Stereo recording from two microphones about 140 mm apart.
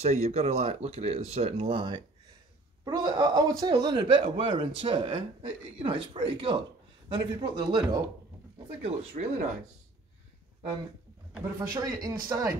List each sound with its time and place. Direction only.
0.0 s speech: 50° right (ahead or behind); by 8.0 s 30° right (ahead or behind)
9.2 s speech: 60° right (ahead or behind)
11.4 s speech: 20° right (ahead or behind)